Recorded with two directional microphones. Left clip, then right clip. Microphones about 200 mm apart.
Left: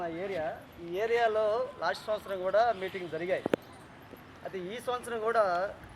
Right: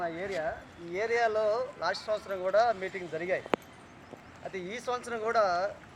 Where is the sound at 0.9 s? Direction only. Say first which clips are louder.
Even; centre (ahead or behind).